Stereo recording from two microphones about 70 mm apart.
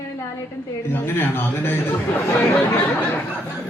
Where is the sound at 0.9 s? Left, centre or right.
Left.